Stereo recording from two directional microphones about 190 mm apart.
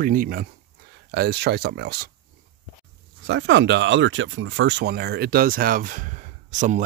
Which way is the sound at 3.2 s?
70° right (ahead or behind).